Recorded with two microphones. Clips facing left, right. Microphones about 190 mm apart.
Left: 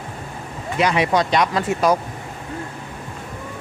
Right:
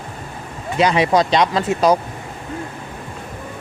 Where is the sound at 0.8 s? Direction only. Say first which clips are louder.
Right 3 dB; 30° right (ahead or behind).